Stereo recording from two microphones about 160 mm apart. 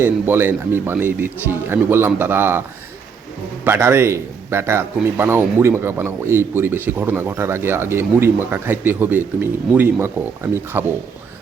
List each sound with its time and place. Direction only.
0.0 s a man's voice: 15° right (ahead or behind)
3.6 s a man's voice: 15° right (ahead or behind)